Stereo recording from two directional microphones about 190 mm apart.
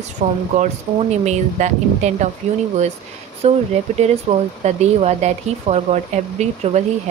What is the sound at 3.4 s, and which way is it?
Speech, 35° right (ahead or behind).